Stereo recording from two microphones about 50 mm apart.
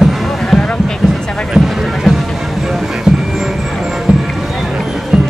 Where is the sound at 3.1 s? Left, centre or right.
Centre.